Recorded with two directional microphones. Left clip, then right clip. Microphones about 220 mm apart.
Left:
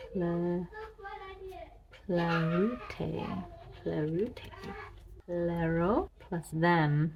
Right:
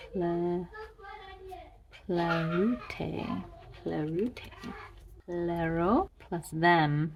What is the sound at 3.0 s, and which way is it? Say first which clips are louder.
Speech: right 1 dB; 35° right (ahead or behind).